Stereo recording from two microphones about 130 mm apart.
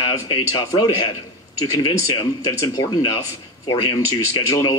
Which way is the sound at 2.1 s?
40° left (ahead or behind).